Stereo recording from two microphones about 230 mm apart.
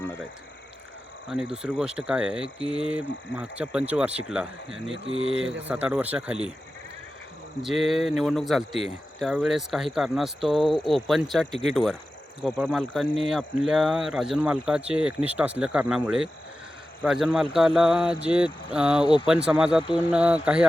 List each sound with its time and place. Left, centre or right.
1.6 s speech: centre
7.6 s speech: centre
19.0 s speech: left
19.3 s speech: centre